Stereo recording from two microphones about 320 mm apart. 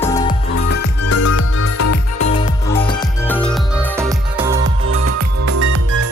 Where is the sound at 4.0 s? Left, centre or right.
Centre.